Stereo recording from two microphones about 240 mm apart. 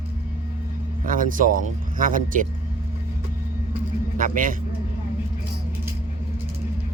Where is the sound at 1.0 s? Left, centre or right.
Right.